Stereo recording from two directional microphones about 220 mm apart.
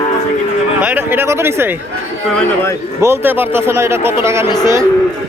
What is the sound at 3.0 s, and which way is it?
Speech, 10° right (ahead or behind).